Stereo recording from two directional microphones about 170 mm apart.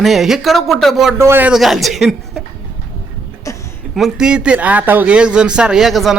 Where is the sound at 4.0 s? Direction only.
5° right (ahead or behind).